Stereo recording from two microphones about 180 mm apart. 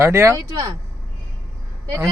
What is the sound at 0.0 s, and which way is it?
Speech, 15° right (ahead or behind).